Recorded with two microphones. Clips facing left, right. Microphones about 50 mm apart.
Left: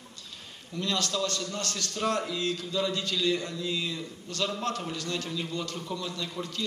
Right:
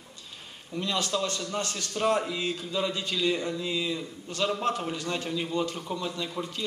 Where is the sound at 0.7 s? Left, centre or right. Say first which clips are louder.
Right 1 dB; right.